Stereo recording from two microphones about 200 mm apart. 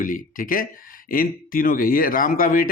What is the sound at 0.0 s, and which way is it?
Speech, 40° left (ahead or behind).